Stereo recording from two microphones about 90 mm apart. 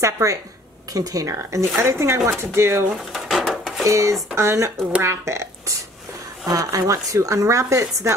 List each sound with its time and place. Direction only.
0.0 s speech: 35° right (ahead or behind)
3.1 s drawer open or close: centre (ahead or behind)
3.8 s a woman's voice: 35° right (ahead or behind)